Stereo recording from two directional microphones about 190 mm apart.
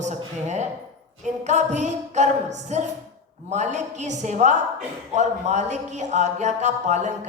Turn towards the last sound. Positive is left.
turn(degrees=-40)  # may be behind; listen again after turning